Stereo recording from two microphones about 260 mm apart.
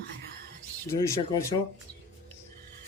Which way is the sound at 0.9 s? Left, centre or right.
Centre.